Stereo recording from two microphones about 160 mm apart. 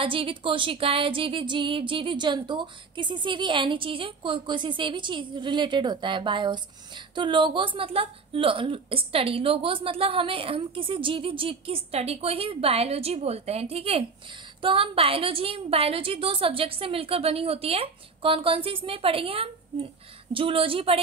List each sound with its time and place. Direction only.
0.0 s a woman's voice: 35° right (ahead or behind)